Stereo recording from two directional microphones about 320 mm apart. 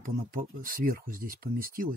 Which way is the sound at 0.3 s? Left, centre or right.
Right.